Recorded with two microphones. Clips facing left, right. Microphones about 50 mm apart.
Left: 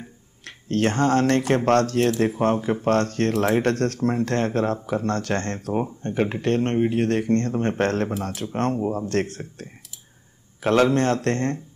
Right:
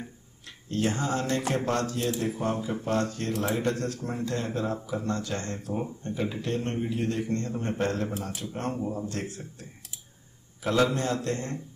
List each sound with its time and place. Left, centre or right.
0.5 s speech: left